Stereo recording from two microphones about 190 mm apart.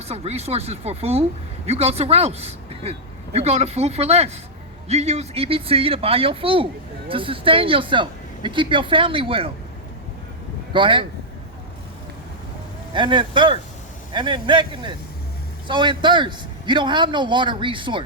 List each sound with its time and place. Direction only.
0.0 s speech: 35° right (ahead or behind)
10.7 s speech: 25° right (ahead or behind)
12.9 s speech: 25° right (ahead or behind)